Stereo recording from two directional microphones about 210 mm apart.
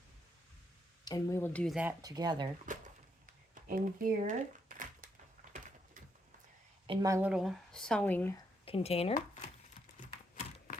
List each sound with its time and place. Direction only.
1.0 s speech: 15° left (ahead or behind); by 2.0 s 5° right (ahead or behind)
2.0 s speech: 20° right (ahead or behind)
2.7 s a sound: 35° right (ahead or behind)
6.8 s speech: 20° right (ahead or behind); by 8.4 s 10° left (ahead or behind)
8.6 s speech: 30° left (ahead or behind)
10.0 s a sound: 40° left (ahead or behind)